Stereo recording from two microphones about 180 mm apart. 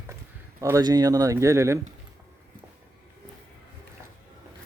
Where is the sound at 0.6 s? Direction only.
20° right (ahead or behind).